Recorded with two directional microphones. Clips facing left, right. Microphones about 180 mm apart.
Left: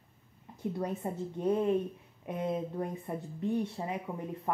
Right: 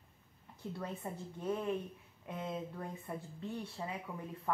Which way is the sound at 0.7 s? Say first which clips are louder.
Left 6 dB; 20° left (ahead or behind).